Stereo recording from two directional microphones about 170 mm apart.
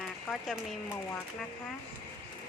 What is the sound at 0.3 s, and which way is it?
Speech, centre (ahead or behind).